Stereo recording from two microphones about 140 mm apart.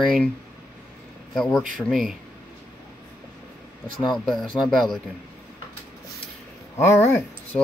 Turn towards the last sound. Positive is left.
turn(degrees=15)  # may be behind; listen again after turning